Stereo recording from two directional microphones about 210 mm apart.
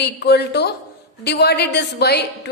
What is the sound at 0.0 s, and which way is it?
A woman's voice, 50° left (ahead or behind).